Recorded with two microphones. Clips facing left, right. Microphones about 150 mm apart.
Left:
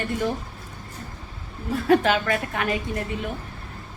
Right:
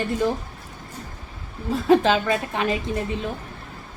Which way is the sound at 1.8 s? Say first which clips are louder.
Right 2 dB; 25° right (ahead or behind).